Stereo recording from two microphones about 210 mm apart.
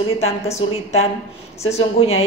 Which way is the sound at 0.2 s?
30° left (ahead or behind).